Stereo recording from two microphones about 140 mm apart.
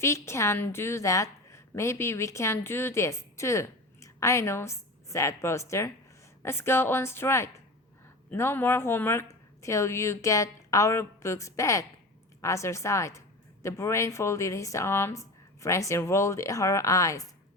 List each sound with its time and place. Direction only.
0.0 s a woman's voice: 20° left (ahead or behind)